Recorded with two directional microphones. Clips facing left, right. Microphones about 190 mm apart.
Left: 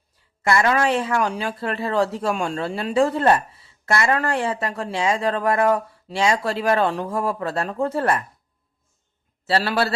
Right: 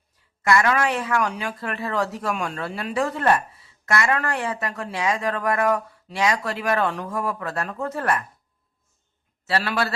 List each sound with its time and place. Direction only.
0.4 s speech: 30° left (ahead or behind)
9.5 s a man's voice: 30° left (ahead or behind)